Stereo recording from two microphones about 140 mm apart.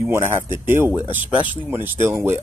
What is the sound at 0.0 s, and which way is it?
Speech, 20° right (ahead or behind).